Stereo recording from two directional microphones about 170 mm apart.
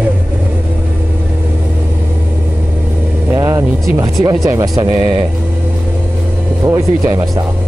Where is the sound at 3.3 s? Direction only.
20° right (ahead or behind).